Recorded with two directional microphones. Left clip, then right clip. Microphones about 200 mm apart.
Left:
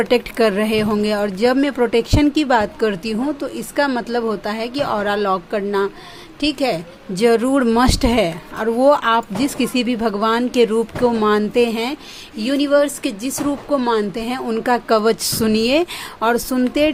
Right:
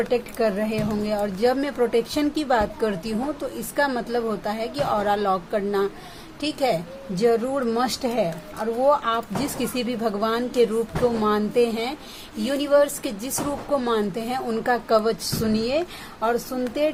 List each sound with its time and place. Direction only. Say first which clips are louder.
0.0 s speech: left 7 dB; 40° left (ahead or behind)
7.2 s speech: left 6 dB; 45° left (ahead or behind)